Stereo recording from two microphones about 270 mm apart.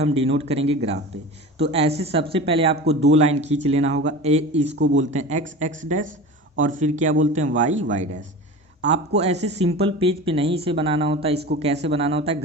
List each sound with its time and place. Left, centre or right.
0.0 s speech: right